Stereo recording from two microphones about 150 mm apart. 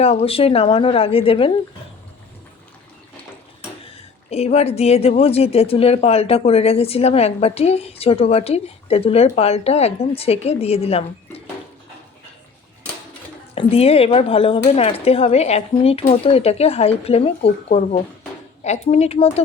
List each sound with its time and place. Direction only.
0.0 s speech: 45° left (ahead or behind)
4.3 s speech: 45° left (ahead or behind)
13.6 s speech: 40° left (ahead or behind)